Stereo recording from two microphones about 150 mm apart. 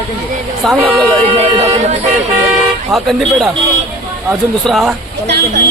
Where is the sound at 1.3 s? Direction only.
40° right (ahead or behind).